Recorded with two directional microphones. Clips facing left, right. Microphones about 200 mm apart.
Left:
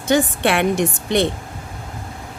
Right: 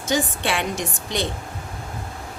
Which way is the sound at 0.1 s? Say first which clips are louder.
Left 6 dB; 60° left (ahead or behind).